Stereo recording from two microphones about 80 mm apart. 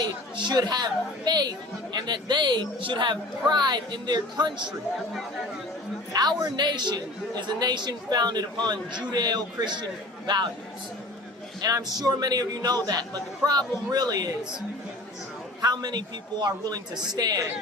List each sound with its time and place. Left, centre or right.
0.0 s speech: right
6.1 s speech: right
11.6 s a man's voice: right
15.6 s a man's voice: right